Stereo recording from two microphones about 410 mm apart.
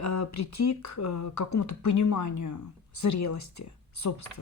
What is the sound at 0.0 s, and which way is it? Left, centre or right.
Speech, left.